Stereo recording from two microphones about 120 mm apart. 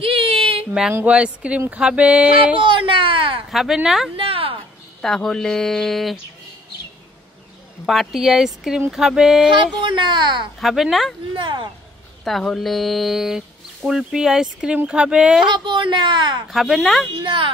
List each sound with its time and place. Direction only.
0.0 s a sound: 50° right (ahead or behind)
1.0 s speech: 10° right (ahead or behind)
2.5 s speech: 45° right (ahead or behind)
3.5 s speech: 5° right (ahead or behind)
4.2 s a sound: 50° right (ahead or behind)
5.0 s speech: 5° left (ahead or behind)
7.8 s speech: centre (ahead or behind)
9.8 s a woman's voice: 40° right (ahead or behind)
10.6 s speech: centre (ahead or behind)
11.3 s a woman's voice: 40° right (ahead or behind)
12.3 s speech: centre (ahead or behind)
15.4 s a woman's voice: 40° right (ahead or behind)
16.4 s speech: centre (ahead or behind)
17.2 s speech: 45° right (ahead or behind)